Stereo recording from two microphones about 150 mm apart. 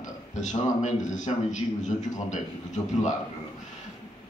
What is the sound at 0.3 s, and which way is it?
A man's voice, 55° left (ahead or behind).